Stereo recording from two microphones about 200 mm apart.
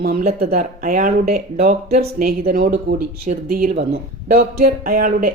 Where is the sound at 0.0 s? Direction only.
50° right (ahead or behind).